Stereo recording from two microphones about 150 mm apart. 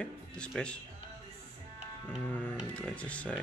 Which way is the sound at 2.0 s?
10° left (ahead or behind).